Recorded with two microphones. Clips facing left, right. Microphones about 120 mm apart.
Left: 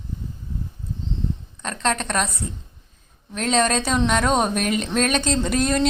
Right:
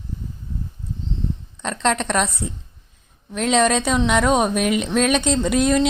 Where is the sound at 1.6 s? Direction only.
20° right (ahead or behind).